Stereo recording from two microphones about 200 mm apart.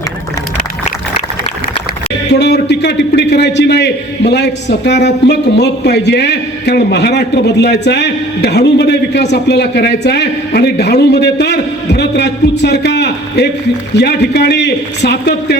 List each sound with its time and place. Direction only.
2.3 s a man's voice: 55° left (ahead or behind)